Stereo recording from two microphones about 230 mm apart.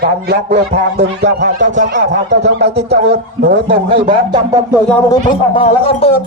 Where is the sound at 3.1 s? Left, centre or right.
Right.